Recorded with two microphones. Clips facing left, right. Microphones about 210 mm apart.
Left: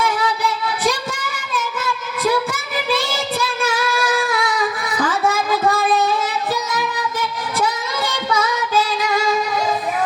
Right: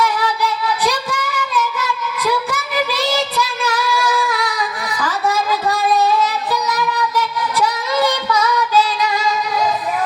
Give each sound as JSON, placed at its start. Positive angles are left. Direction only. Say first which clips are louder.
{"t": 2.1, "sound": "child singing", "louder": "left 2 dB", "side_deg": 50}
{"t": 4.3, "sound": "a sound", "louder": "left 2 dB", "side_deg": 50}
{"t": 7.6, "sound": "singing", "louder": "right 5 dB", "side_deg": 50}